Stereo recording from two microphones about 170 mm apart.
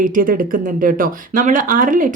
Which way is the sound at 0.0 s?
55° right (ahead or behind).